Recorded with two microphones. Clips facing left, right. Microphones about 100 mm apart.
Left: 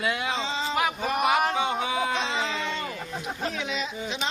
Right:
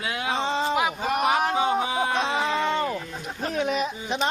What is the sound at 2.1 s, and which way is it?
Speech, 55° right (ahead or behind).